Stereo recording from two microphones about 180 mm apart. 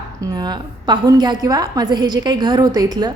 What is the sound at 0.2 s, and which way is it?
A woman's voice, 25° right (ahead or behind).